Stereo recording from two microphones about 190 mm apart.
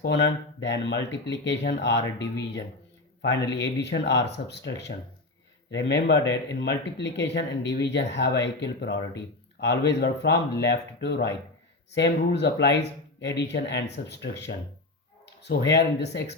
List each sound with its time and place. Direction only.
0.0 s speech: 65° left (ahead or behind)